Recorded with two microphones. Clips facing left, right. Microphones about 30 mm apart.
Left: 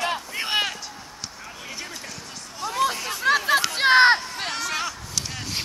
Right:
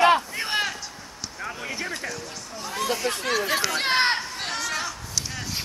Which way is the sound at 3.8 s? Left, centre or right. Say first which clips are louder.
Left 8 dB; left.